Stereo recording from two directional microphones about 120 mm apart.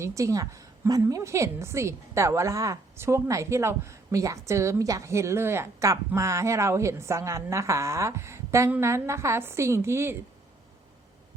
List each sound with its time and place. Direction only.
0.0 s a woman's voice: 25° right (ahead or behind)